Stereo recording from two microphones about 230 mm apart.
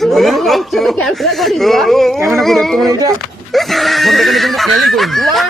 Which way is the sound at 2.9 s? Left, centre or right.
Centre.